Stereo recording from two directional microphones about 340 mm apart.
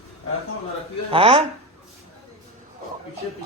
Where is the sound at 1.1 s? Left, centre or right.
Centre.